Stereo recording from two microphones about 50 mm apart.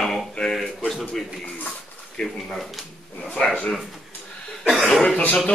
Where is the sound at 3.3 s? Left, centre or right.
Left.